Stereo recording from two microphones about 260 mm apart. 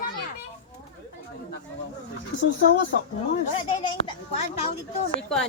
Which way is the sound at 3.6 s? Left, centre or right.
Centre.